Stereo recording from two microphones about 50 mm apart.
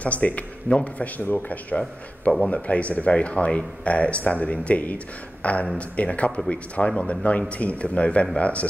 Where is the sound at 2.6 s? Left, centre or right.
Left.